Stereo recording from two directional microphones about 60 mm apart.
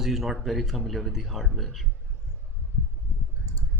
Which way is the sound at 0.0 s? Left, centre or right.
Centre.